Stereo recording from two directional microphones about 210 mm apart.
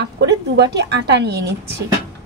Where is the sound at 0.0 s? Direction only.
55° right (ahead or behind).